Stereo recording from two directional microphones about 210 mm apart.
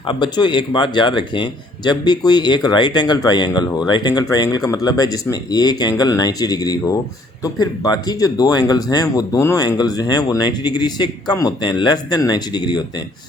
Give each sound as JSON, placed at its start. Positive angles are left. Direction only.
{"t": 0.1, "sound": "speech", "side_deg": 20}